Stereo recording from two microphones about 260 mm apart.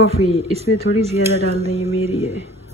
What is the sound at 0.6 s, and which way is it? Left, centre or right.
Speech, right.